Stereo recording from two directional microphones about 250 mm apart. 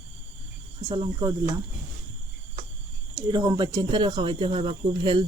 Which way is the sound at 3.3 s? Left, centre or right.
Centre.